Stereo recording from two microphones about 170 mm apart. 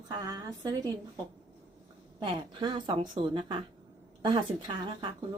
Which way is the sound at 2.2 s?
30° right (ahead or behind).